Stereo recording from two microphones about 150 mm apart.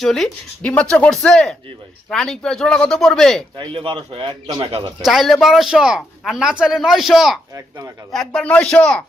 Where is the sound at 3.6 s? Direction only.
35° right (ahead or behind).